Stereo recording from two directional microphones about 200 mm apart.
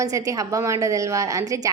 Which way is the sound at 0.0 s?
15° right (ahead or behind).